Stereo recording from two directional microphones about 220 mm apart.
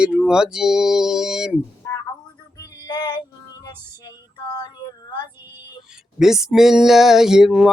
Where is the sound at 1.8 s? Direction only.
15° left (ahead or behind).